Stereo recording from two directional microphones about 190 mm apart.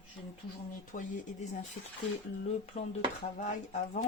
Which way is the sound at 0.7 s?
40° left (ahead or behind).